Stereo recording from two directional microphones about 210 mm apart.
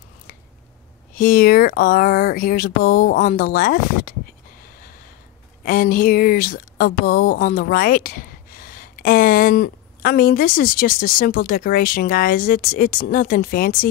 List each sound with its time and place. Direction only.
1.1 s speech: 45° left (ahead or behind)
5.7 s speech: 45° left (ahead or behind)